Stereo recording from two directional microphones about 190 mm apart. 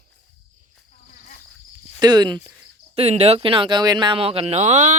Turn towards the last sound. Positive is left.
turn(degrees=-40)  # may be behind; listen again after turning